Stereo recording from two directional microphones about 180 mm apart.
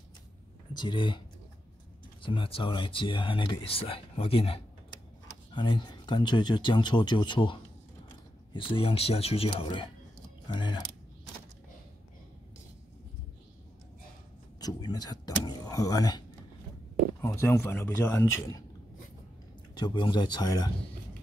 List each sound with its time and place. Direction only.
0.7 s speech: 25° left (ahead or behind)
2.2 s speech: 30° left (ahead or behind)
8.5 s speech: 30° left (ahead or behind)
14.6 s power windows: 20° left (ahead or behind)
17.2 s speech: 10° left (ahead or behind)
19.7 s speech: 25° left (ahead or behind)